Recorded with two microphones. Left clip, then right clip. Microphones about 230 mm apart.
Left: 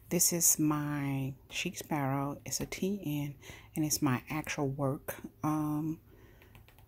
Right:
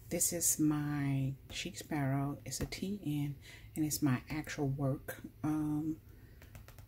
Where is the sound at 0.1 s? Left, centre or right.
Left.